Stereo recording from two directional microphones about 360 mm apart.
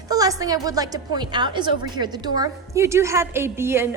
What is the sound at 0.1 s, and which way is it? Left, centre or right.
A woman's voice, centre.